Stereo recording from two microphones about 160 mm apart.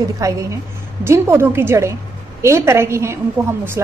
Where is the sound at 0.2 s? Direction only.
20° right (ahead or behind).